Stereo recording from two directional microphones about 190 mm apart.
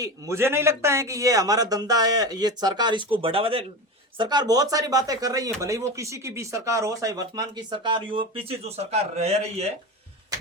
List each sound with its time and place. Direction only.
0.0 s speech: 15° right (ahead or behind); by 9.7 s 35° right (ahead or behind)